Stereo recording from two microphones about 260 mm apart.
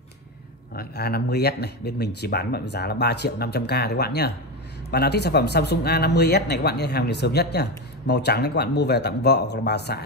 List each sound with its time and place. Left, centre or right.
0.7 s speech: left